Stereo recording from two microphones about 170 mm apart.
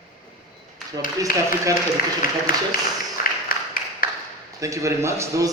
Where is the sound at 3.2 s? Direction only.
50° left (ahead or behind).